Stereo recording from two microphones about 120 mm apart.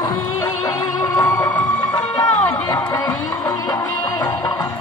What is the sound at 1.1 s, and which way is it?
Music, 35° left (ahead or behind).